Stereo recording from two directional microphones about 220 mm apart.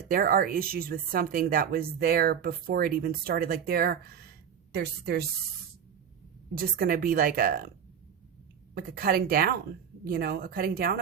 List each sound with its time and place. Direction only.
0.1 s a woman's voice: 45° right (ahead or behind)
6.5 s speech: 40° right (ahead or behind)
8.7 s a woman's voice: 45° right (ahead or behind)